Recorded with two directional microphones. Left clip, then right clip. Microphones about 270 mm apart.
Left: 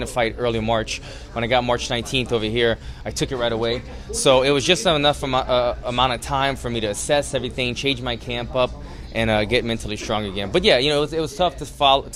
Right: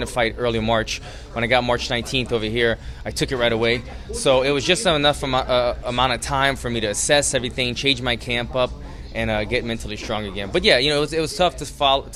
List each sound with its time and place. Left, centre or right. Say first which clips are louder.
0.0 s a man's voice: even; centre
3.3 s speech: right 3 dB; centre
4.1 s a man's voice: left 2 dB; centre
9.1 s speech: left 3 dB; centre
11.8 s speech: left 2 dB; centre